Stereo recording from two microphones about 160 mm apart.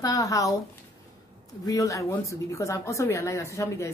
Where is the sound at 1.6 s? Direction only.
20° left (ahead or behind).